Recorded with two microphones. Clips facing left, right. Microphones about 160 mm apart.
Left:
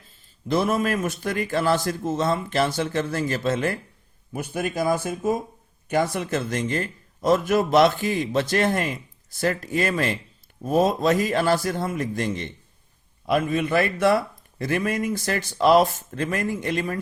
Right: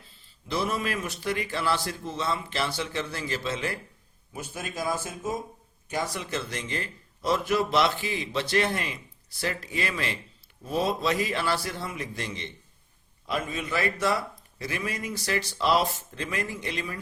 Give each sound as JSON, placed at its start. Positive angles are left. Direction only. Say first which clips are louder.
{"t": 0.1, "sound": "a man's voice", "louder": "left 8 dB", "side_deg": 50}
{"t": 13.2, "sound": "a man's voice", "louder": "left 9 dB", "side_deg": 60}